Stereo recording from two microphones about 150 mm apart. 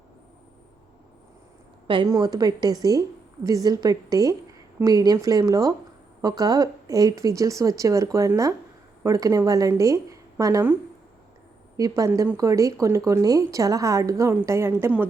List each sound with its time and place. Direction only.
1.9 s speech: 30° right (ahead or behind)
11.8 s speech: 20° right (ahead or behind)